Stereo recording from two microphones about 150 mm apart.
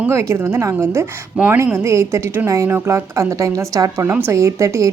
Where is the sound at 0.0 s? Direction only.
20° right (ahead or behind).